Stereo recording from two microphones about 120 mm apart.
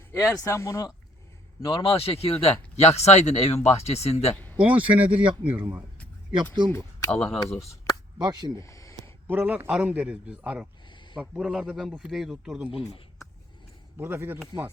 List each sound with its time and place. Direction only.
0.2 s speech: 25° left (ahead or behind)
1.7 s speech: 50° left (ahead or behind)
4.6 s a man's voice: 10° right (ahead or behind)
6.3 s speech: 40° right (ahead or behind)
7.2 s speech: 10° left (ahead or behind)
8.2 s speech: 35° right (ahead or behind)
8.6 s a sound: 25° left (ahead or behind)
9.2 s a man's voice: 15° right (ahead or behind)
10.8 s a sound: 40° left (ahead or behind)
11.2 s a man's voice: 5° right (ahead or behind)
13.9 s a man's voice: 20° right (ahead or behind)